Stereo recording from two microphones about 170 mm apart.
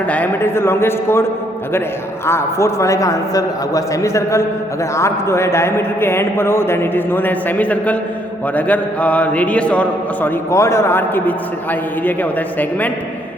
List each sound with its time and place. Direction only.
0.1 s a man's voice: 10° left (ahead or behind)